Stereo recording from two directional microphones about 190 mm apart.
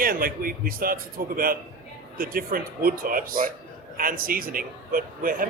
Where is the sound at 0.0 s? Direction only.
50° right (ahead or behind).